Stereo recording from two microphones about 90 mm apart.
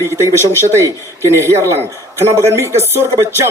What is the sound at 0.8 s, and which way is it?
A woman's voice, 30° right (ahead or behind).